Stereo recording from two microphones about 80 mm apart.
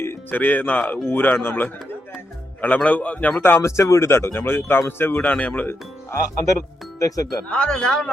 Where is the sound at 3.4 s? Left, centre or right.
Left.